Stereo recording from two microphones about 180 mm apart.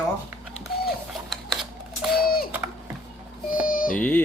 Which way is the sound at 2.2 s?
55° left (ahead or behind).